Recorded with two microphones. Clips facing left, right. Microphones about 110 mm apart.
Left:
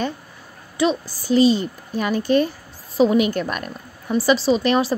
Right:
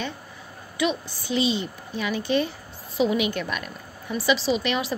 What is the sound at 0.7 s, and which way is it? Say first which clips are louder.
A child's voice: left 5 dB; 35° left (ahead or behind).